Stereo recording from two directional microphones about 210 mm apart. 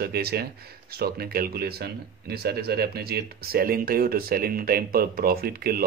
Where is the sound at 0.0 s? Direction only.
50° right (ahead or behind).